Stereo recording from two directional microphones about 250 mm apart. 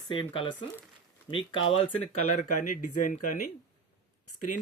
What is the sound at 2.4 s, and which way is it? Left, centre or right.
Speech, left.